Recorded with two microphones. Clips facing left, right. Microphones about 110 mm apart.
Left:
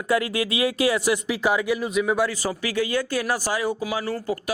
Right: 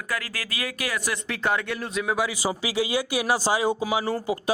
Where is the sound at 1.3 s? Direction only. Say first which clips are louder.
Left 4 dB; 5° left (ahead or behind).